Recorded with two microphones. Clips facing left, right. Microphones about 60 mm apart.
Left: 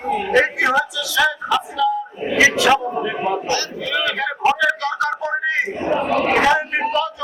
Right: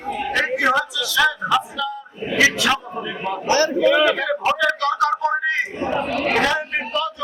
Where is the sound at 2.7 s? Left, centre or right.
Centre.